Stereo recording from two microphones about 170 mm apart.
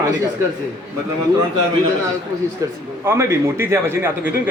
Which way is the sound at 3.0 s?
15° right (ahead or behind).